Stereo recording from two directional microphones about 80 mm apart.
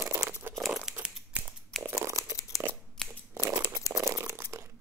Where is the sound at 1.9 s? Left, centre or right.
Right.